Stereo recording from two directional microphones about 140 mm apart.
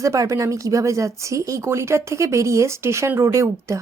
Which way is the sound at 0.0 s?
25° right (ahead or behind).